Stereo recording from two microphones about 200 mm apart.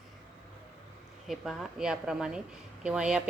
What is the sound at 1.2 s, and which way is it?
A woman's voice, centre (ahead or behind).